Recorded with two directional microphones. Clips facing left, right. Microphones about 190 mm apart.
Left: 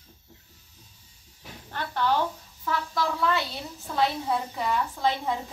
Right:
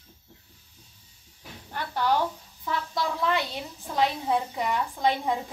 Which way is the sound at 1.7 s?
10° right (ahead or behind).